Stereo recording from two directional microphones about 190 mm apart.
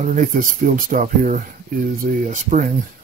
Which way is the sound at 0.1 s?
45° right (ahead or behind).